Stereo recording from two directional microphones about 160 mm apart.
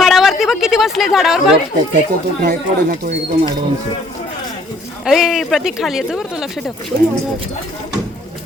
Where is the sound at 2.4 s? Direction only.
65° right (ahead or behind).